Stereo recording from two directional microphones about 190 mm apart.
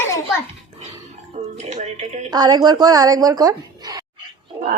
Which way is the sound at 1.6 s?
35° right (ahead or behind).